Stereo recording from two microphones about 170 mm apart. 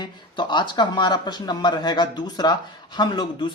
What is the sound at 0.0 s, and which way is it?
Speech, 25° left (ahead or behind).